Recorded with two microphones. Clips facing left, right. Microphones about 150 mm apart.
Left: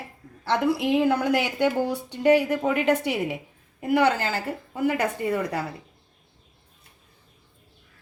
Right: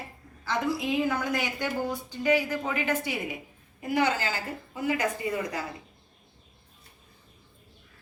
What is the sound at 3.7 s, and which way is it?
Speech, 55° left (ahead or behind).